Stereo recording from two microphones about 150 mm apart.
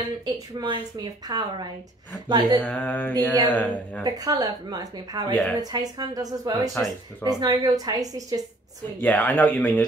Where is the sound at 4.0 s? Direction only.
25° right (ahead or behind).